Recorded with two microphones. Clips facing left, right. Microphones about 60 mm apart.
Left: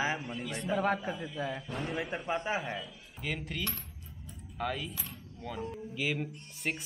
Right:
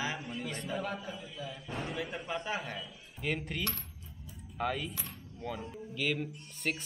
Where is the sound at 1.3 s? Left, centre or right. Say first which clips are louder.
Left 7 dB; left.